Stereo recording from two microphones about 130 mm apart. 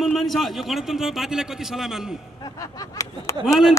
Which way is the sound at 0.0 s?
Centre (ahead or behind).